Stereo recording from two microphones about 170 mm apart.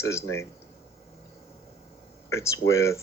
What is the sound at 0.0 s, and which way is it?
Speech, 15° left (ahead or behind).